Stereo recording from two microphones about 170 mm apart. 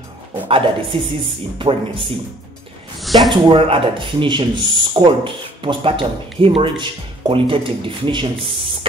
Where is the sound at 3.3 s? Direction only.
30° right (ahead or behind).